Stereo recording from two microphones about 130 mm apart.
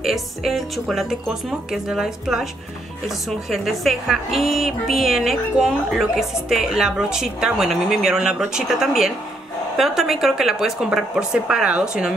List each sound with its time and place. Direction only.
0.0 s a woman's voice: centre (ahead or behind)